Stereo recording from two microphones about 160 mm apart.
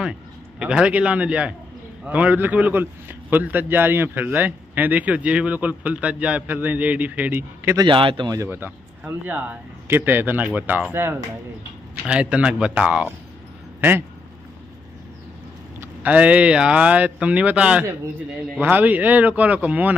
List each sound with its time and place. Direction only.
0.6 s a man's voice: 5° right (ahead or behind)
7.8 s a man's voice: 30° right (ahead or behind); by 14.0 s 10° right (ahead or behind)
15.8 s a man's voice: 10° right (ahead or behind)